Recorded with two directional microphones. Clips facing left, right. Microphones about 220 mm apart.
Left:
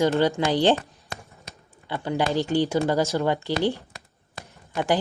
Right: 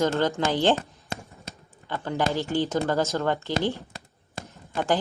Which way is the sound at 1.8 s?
15° left (ahead or behind).